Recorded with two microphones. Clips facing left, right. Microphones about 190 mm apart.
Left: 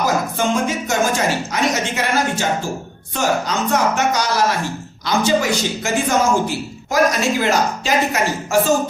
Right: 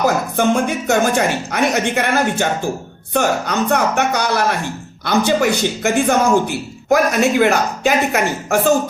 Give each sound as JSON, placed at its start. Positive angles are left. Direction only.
{"t": 0.0, "sound": "speech", "side_deg": -60}